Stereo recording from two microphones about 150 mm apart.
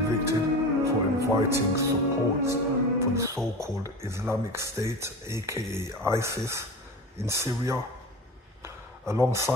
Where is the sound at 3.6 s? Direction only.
20° right (ahead or behind).